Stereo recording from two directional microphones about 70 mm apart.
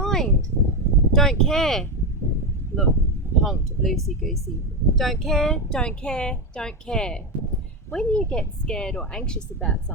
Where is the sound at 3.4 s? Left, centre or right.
Centre.